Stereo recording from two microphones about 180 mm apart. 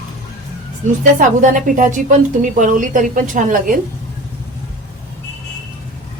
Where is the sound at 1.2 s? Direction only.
45° right (ahead or behind).